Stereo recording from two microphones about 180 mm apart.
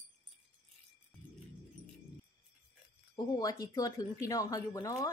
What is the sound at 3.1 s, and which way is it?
Speech, 20° left (ahead or behind).